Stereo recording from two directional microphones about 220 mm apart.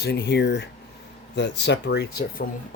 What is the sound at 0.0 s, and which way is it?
Speech, 50° left (ahead or behind).